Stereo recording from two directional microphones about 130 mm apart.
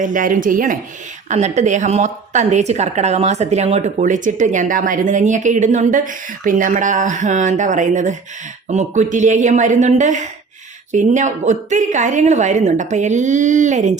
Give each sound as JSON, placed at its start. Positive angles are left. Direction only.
{"t": 0.0, "sound": "speech", "side_deg": -90}
{"t": 1.3, "sound": "a woman's voice", "side_deg": -60}